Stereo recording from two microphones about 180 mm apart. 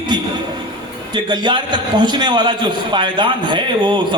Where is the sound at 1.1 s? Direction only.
25° right (ahead or behind).